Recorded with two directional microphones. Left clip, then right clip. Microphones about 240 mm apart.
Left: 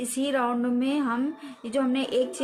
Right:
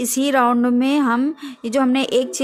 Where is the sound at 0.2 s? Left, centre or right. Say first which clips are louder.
Right 9 dB; right.